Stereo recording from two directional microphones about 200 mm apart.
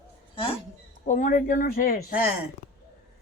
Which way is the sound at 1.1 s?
40° left (ahead or behind).